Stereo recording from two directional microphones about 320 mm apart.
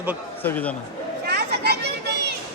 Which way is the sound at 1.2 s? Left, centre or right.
Right.